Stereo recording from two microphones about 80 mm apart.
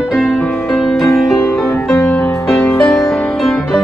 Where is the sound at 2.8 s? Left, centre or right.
Centre.